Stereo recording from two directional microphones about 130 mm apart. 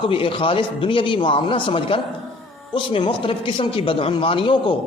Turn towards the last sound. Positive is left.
turn(degrees=40)  # may be behind; listen again after turning